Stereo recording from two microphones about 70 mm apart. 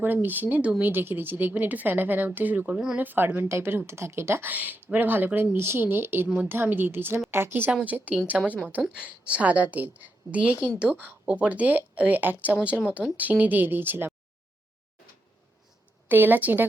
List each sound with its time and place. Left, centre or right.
0.0 s a woman's voice: right
4.5 s a woman's voice: right
6.2 s a woman's voice: centre
6.5 s a woman's voice: right
7.7 s a woman's voice: centre
16.0 s a woman's voice: right